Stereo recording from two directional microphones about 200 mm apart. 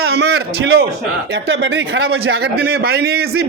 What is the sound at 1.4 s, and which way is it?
A man's voice, 70° right (ahead or behind).